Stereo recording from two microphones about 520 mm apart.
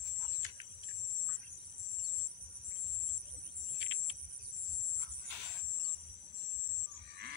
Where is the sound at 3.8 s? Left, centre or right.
Right.